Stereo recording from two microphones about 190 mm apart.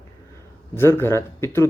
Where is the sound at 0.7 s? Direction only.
10° left (ahead or behind).